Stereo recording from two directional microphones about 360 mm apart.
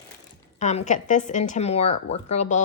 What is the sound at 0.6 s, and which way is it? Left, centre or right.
A woman's voice, centre.